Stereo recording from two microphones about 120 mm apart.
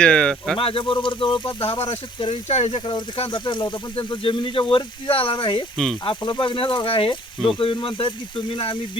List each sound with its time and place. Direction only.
0.0 s speech: 5° left (ahead or behind)
0.6 s speech: 45° left (ahead or behind)
5.7 s speech: 5° left (ahead or behind)
6.1 s speech: 45° left (ahead or behind)